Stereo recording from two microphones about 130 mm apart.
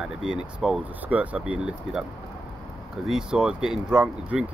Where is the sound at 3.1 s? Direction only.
5° right (ahead or behind).